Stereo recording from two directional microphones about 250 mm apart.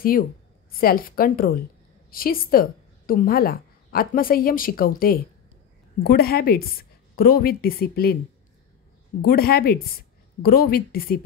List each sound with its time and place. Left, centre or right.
0.7 s a woman's voice: left
9.2 s a woman's voice: left